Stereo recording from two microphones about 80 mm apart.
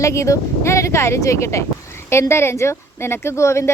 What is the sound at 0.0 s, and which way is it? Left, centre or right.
Speech, left.